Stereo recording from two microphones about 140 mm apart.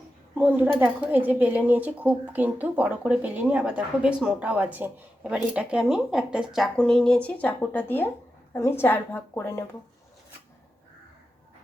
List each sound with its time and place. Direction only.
0.4 s speech: 10° right (ahead or behind); by 9.6 s 20° left (ahead or behind)